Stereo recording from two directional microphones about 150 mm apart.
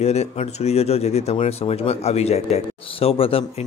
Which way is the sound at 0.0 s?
45° left (ahead or behind).